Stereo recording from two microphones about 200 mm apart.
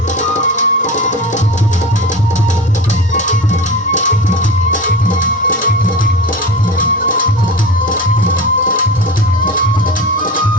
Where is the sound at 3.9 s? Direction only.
40° left (ahead or behind).